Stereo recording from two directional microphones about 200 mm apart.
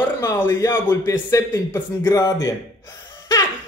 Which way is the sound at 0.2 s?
15° left (ahead or behind).